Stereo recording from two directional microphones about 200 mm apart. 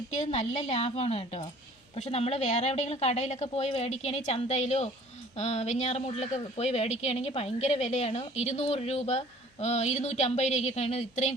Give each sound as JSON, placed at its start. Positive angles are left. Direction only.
{"t": 0.1, "sound": "speech", "side_deg": 35}